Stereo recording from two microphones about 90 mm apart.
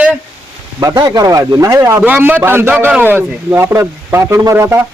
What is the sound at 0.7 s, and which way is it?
A man's voice, 45° right (ahead or behind).